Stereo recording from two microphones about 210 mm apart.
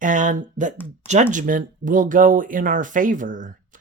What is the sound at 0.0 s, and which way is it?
Speech, 35° right (ahead or behind).